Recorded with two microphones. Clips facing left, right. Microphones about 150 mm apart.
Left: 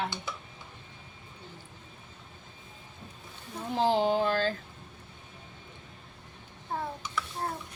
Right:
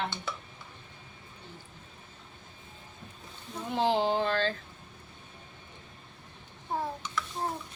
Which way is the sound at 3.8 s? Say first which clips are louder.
Left 2 dB; 50° left (ahead or behind).